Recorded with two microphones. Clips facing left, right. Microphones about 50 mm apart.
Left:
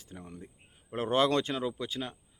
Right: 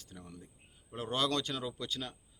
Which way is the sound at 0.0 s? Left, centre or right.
Left.